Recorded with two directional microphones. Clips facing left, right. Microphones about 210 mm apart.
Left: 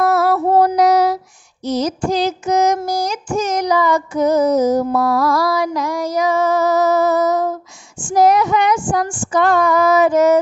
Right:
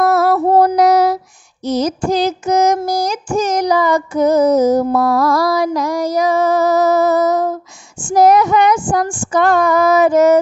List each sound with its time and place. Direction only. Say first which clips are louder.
0.0 s female singing: right 2 dB; 45° right (ahead or behind)
1.7 s child singing: right 2 dB; 50° right (ahead or behind)
8.1 s female singing: right 3 dB; 45° right (ahead or behind)